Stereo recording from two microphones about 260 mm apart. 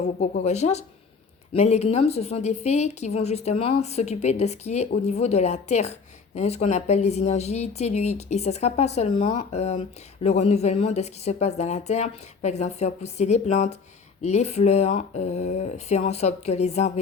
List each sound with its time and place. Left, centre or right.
0.2 s speech: left